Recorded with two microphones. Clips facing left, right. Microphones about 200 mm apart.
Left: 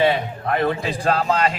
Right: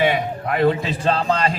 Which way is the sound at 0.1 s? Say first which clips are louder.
Even; 15° right (ahead or behind).